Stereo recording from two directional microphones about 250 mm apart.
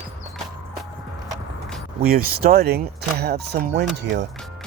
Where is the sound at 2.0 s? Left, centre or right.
Right.